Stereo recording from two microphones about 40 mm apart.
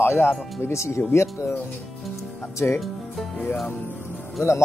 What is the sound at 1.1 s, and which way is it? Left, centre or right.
Speech, left.